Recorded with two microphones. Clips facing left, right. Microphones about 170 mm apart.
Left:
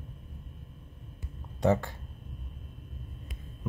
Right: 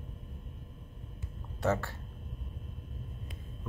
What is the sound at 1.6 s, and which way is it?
Speech, 15° left (ahead or behind).